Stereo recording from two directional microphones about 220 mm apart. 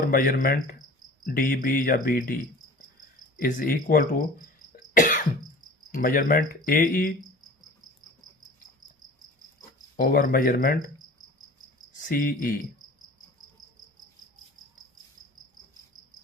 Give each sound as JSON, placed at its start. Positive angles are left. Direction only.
{"t": 0.0, "sound": "speech", "side_deg": 40}
{"t": 3.4, "sound": "speech", "side_deg": 40}
{"t": 4.9, "sound": "cough", "side_deg": 35}
{"t": 5.9, "sound": "speech", "side_deg": 40}
{"t": 10.0, "sound": "speech", "side_deg": 40}
{"t": 12.0, "sound": "speech", "side_deg": 40}